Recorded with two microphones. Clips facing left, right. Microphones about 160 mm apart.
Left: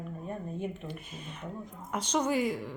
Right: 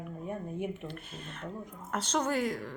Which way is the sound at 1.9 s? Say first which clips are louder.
Left 2 dB; 10° left (ahead or behind).